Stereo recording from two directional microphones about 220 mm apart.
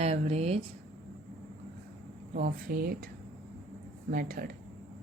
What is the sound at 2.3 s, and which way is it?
Speech, 40° right (ahead or behind).